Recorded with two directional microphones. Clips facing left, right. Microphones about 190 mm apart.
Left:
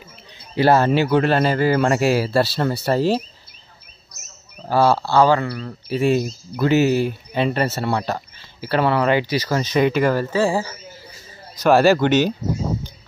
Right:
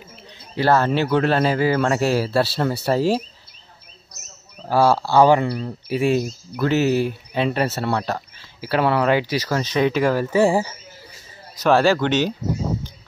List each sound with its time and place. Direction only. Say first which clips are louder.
0.6 s speech: left 2 dB; 10° left (ahead or behind); by 3.3 s 5° right (ahead or behind)
4.6 s speech: even; 10° right (ahead or behind)
10.3 s speech: right 2 dB; 20° right (ahead or behind)
11.7 s speech: left 3 dB; 10° left (ahead or behind)